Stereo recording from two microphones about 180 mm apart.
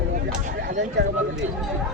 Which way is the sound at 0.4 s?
45° right (ahead or behind).